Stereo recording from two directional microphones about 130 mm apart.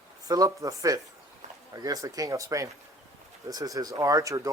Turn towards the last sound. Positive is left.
turn(degrees=-25)  # may be behind; listen again after turning